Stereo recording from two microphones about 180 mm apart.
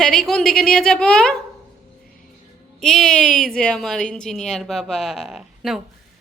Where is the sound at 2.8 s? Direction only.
5° left (ahead or behind).